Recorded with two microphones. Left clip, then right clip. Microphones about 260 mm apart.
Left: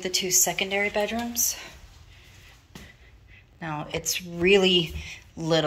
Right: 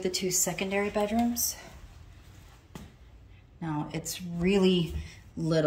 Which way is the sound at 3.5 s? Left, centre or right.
Centre.